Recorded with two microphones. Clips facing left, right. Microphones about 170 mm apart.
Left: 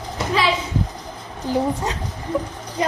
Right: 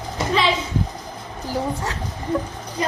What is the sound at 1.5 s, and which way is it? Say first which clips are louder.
Speech: left 4 dB; 20° left (ahead or behind).